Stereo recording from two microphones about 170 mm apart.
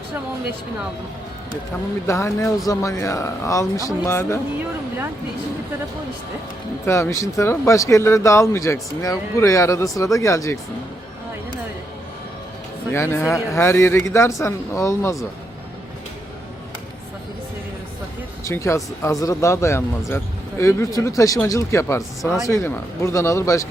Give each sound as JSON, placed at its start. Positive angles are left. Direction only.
{"t": 2.0, "sound": "speech", "side_deg": 15}
{"t": 6.8, "sound": "speech", "side_deg": 15}
{"t": 12.9, "sound": "speech", "side_deg": 15}
{"t": 18.4, "sound": "speech", "side_deg": 15}
{"t": 22.2, "sound": "speech", "side_deg": -5}
{"t": 22.4, "sound": "speech", "side_deg": 15}